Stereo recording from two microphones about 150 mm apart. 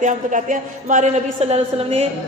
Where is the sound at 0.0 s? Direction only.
55° right (ahead or behind).